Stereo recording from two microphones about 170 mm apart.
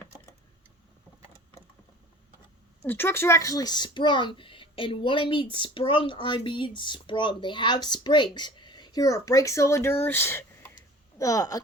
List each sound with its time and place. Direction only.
2.8 s speech: 10° left (ahead or behind)